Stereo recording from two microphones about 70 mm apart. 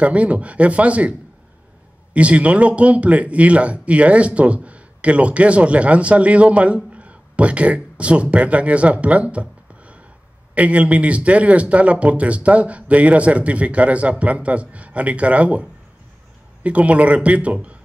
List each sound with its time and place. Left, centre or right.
0.0 s a man's voice: centre
2.1 s a man's voice: centre